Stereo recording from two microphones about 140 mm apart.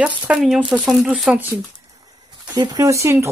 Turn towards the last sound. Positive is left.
turn(degrees=-20)  # may be behind; listen again after turning